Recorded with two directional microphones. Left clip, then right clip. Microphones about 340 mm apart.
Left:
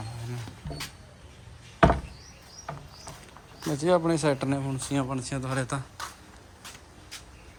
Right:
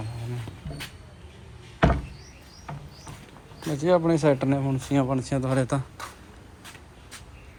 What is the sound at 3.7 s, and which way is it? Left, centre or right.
Speech, centre.